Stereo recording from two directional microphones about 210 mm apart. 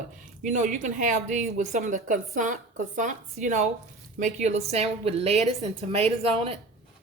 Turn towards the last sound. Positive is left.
turn(degrees=-30)  # may be behind; listen again after turning